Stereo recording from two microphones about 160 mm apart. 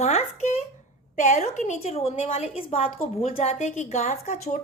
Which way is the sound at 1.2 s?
50° left (ahead or behind).